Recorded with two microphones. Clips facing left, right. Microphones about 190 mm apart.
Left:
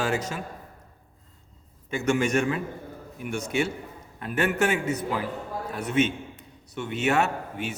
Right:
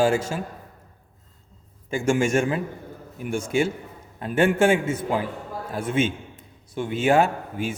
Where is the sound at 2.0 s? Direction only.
30° right (ahead or behind).